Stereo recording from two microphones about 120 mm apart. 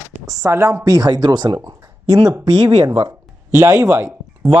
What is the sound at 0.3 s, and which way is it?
A man's voice, 30° right (ahead or behind).